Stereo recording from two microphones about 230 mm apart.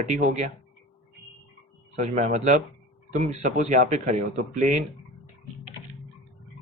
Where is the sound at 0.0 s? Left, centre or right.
Right.